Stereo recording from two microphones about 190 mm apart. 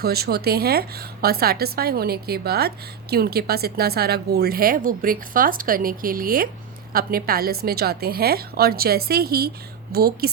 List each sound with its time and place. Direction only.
0.0 s a woman's voice: 55° right (ahead or behind)